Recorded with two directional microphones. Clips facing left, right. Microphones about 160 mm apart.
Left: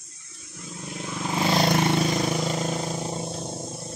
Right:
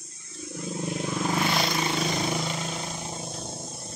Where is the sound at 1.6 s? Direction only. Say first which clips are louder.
Left 6 dB; 55° left (ahead or behind).